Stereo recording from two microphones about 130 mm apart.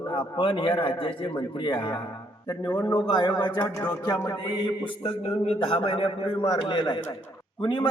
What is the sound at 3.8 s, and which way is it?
Speech, 25° left (ahead or behind).